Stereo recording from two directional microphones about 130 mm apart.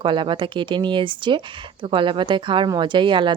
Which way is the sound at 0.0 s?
40° right (ahead or behind).